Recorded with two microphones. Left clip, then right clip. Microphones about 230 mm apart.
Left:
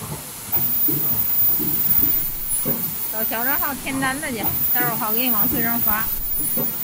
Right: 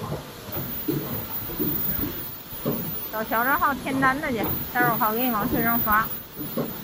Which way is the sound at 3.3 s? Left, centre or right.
Centre.